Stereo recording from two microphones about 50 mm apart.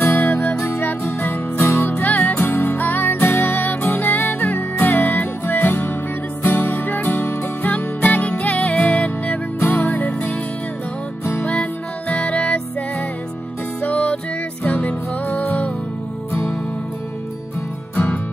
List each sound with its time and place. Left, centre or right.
0.0 s music: left
1.2 s music: left
1.8 s music: left
12.1 s music: left
13.8 s music: left
17.9 s music: left